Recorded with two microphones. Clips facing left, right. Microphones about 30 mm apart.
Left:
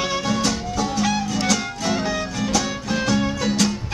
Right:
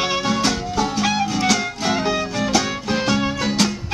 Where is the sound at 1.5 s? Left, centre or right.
Right.